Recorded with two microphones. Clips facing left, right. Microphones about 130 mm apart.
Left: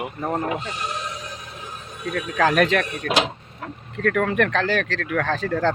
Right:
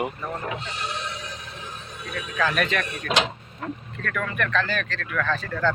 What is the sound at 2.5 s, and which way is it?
Speech, 90° left.